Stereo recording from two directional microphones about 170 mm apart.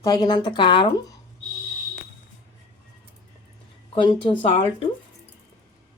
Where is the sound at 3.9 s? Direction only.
30° left (ahead or behind).